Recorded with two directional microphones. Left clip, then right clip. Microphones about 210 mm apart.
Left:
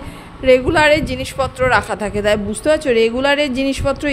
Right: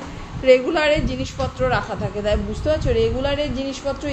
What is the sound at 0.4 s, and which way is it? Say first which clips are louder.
A woman's voice: left 3 dB; 25° left (ahead or behind).